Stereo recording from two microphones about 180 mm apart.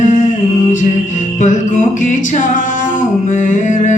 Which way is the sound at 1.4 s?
45° left (ahead or behind).